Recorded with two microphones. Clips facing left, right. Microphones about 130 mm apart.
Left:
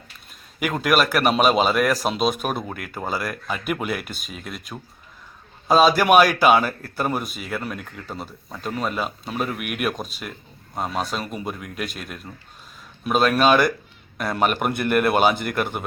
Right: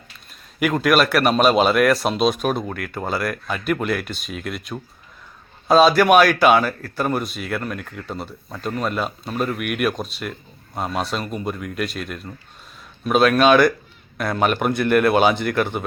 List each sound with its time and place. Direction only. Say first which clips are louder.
0.6 s a man's voice: right 3 dB; centre (ahead or behind)